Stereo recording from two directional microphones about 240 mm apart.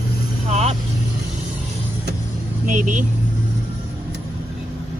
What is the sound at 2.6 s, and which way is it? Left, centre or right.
Speech, right.